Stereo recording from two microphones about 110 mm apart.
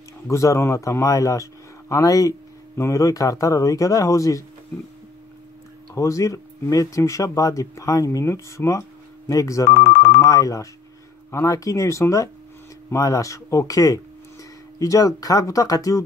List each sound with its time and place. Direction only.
0.3 s speech: 25° left (ahead or behind)
5.9 s speech: 30° left (ahead or behind)